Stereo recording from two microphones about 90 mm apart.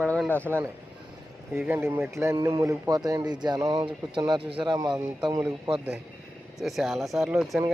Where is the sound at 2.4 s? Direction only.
35° right (ahead or behind); by 4.4 s 55° right (ahead or behind).